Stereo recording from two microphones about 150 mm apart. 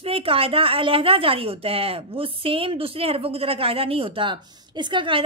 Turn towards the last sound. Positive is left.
turn(degrees=-35)  # may be behind; listen again after turning